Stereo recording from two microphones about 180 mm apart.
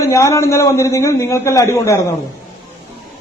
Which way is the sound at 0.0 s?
15° left (ahead or behind).